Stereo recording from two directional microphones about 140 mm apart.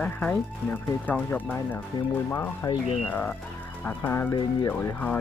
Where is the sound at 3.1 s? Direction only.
10° left (ahead or behind).